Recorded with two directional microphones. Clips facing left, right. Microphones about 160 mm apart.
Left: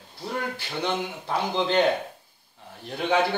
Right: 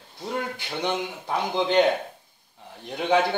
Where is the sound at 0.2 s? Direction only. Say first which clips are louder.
Right 1 dB; 15° right (ahead or behind).